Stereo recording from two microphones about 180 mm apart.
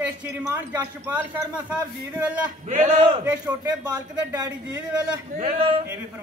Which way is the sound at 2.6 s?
40° right (ahead or behind).